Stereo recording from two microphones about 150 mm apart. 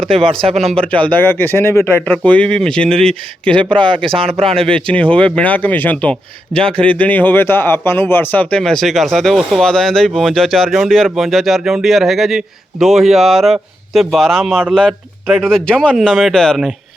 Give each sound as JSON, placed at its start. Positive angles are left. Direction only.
{"t": 0.0, "sound": "speech", "side_deg": -40}
{"t": 0.5, "sound": "speech", "side_deg": 0}
{"t": 3.5, "sound": "speech", "side_deg": -35}
{"t": 5.1, "sound": "speech", "side_deg": 5}
{"t": 6.5, "sound": "speech", "side_deg": -35}
{"t": 7.0, "sound": "speech", "side_deg": 10}